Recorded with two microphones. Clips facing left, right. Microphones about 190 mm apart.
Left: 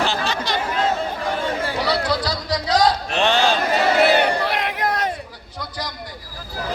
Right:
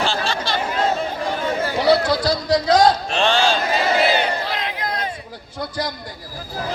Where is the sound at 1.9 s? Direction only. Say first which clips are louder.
Right 8 dB; 50° right (ahead or behind).